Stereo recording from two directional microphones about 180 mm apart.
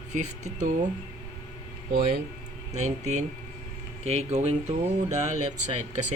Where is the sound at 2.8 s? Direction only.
40° right (ahead or behind).